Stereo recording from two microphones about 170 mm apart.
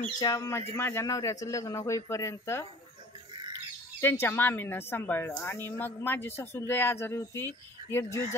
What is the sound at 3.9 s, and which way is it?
Speech, 15° left (ahead or behind).